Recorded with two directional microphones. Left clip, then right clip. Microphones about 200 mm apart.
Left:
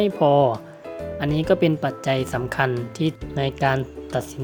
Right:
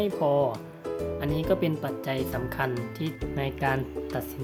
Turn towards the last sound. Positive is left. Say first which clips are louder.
# left 5 dB
turn(degrees=25)  # may be behind; listen again after turning